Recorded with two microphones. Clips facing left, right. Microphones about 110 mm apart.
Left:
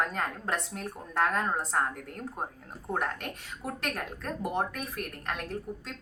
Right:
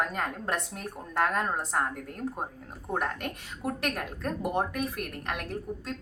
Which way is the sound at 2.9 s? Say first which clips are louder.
Right 1 dB; 20° right (ahead or behind).